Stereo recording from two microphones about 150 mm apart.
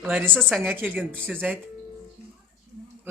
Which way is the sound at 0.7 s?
10° right (ahead or behind).